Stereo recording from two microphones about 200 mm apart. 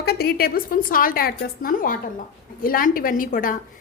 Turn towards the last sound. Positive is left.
turn(degrees=45)  # may be behind; listen again after turning